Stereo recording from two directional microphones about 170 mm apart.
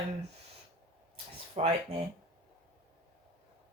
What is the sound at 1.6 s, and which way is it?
Speech, 35° right (ahead or behind).